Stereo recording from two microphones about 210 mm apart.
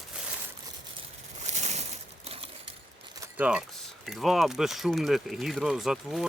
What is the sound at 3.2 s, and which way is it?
Keys jangling, 5° right (ahead or behind).